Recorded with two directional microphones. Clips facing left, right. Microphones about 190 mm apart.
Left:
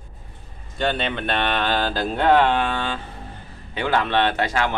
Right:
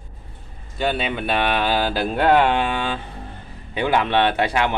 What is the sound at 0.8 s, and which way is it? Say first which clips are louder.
Speech: right 1 dB; 5° right (ahead or behind).